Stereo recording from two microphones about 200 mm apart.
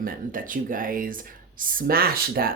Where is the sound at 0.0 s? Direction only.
45° right (ahead or behind).